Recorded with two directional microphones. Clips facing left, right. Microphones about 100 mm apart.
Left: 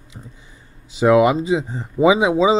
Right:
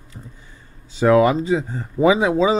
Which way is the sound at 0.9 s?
15° left (ahead or behind).